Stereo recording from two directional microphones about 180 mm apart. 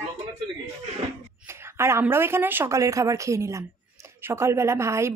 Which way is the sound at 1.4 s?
15° right (ahead or behind).